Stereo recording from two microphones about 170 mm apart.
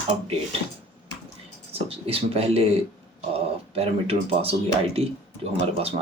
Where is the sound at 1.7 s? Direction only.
35° right (ahead or behind).